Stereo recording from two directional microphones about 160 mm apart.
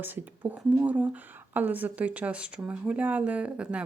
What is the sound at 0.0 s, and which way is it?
A woman's voice, 10° right (ahead or behind).